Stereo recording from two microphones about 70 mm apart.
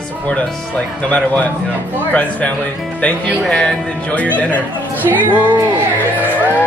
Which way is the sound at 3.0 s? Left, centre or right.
Centre.